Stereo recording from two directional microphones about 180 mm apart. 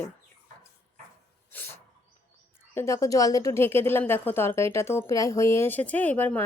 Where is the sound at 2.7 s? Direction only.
15° left (ahead or behind).